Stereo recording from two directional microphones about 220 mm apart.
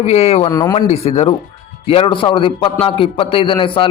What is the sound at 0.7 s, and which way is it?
A man's voice, 30° left (ahead or behind).